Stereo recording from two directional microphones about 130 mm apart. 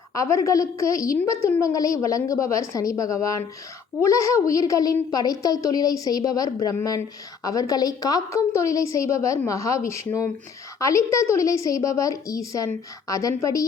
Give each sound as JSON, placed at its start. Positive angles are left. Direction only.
{"t": 0.1, "sound": "a woman's voice", "side_deg": 25}